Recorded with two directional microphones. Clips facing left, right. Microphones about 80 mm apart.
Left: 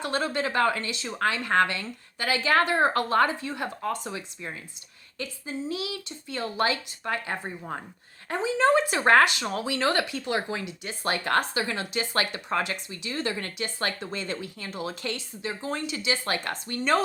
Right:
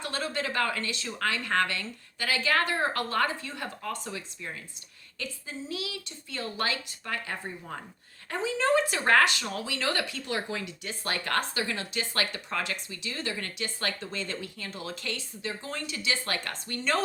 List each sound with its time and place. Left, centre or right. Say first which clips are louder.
0.0 s speech: left 5 dB; left